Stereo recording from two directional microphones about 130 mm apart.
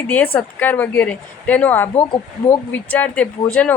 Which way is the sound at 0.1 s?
15° left (ahead or behind).